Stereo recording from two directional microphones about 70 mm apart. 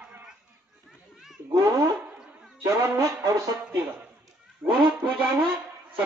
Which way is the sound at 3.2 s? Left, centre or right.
Right.